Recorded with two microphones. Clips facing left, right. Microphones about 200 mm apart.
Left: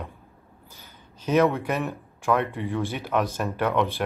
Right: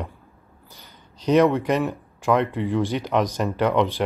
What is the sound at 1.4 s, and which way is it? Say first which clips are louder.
Speech: right 3 dB; 15° right (ahead or behind).